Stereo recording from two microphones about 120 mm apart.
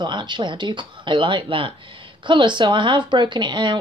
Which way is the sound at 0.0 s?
40° right (ahead or behind).